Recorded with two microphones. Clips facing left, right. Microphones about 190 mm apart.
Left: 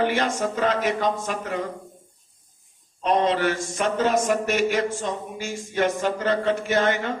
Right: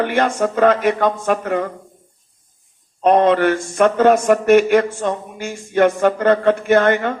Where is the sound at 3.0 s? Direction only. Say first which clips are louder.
Right 8 dB; 55° right (ahead or behind).